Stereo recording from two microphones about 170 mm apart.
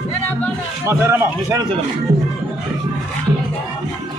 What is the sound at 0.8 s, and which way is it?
Speech, 15° right (ahead or behind).